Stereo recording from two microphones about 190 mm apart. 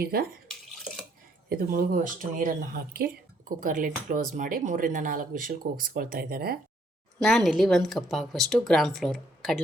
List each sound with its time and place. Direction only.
0.0 s speech: 55° right (ahead or behind)
1.5 s speech: 50° right (ahead or behind)
7.2 s speech: centre (ahead or behind)